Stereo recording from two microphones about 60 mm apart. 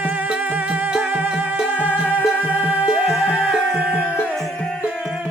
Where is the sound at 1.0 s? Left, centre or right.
Right.